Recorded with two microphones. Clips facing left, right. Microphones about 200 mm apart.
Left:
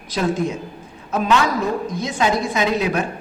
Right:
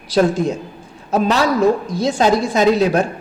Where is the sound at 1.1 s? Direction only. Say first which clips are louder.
Right 3 dB; 35° right (ahead or behind).